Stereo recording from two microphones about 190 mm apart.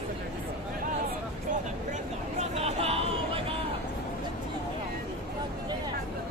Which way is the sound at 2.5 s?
30° right (ahead or behind).